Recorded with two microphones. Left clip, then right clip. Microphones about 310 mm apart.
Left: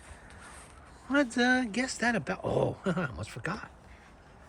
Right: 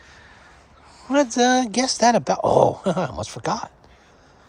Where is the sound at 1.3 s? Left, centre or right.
Centre.